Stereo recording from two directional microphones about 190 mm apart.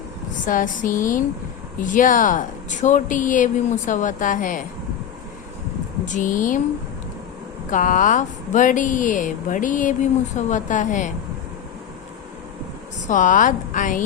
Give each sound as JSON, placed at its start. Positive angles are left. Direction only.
{"t": 0.4, "sound": "speech", "side_deg": 45}
{"t": 6.1, "sound": "speech", "side_deg": 45}
{"t": 7.7, "sound": "speech", "side_deg": 45}
{"t": 13.1, "sound": "speech", "side_deg": 45}